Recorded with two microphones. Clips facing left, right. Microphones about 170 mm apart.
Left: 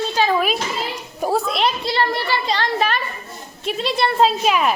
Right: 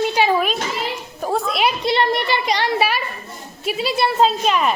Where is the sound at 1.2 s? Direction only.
5° left (ahead or behind).